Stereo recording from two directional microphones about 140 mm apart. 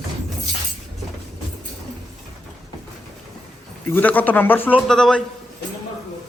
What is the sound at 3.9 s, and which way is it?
Speech, 10° left (ahead or behind).